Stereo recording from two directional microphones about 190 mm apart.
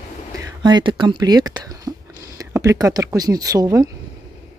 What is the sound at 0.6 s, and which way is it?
Speech, 25° right (ahead or behind).